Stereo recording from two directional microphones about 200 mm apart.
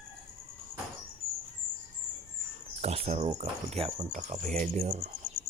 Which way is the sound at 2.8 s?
30° right (ahead or behind).